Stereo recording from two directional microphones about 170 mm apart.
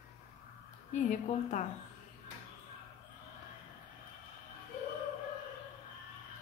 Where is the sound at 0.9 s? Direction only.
45° left (ahead or behind).